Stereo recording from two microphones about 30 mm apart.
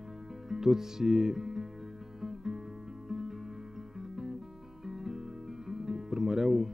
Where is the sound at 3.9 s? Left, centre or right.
Centre.